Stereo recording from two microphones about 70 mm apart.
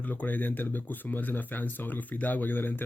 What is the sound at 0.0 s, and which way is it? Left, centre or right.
Speech, left.